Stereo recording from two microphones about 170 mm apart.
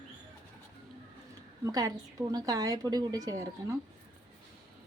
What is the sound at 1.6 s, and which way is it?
A woman's voice, 20° right (ahead or behind).